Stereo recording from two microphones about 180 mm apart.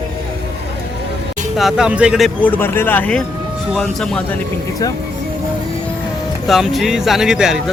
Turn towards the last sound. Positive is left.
turn(degrees=0)  # may be behind; listen again after turning